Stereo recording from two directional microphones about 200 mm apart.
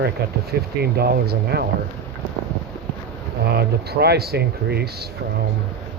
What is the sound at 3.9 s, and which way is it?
Speech, 50° right (ahead or behind).